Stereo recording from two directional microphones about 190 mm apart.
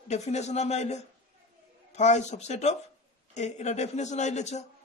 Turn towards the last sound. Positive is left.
turn(degrees=35)  # may be behind; listen again after turning